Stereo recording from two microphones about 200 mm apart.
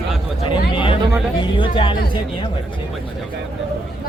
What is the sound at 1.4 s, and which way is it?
Speech, 25° left (ahead or behind).